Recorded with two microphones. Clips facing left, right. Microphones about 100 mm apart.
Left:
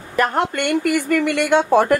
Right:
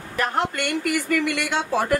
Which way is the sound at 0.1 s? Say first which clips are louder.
Left 5 dB; 55° left (ahead or behind).